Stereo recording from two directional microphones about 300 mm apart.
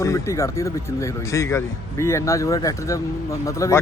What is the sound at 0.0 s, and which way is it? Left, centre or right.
Speech, centre.